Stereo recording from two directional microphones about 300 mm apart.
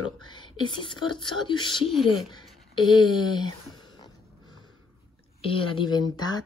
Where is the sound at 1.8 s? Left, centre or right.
Centre.